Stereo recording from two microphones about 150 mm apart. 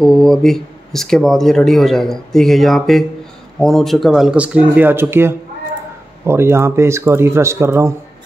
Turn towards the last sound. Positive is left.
turn(degrees=-15)  # may be behind; listen again after turning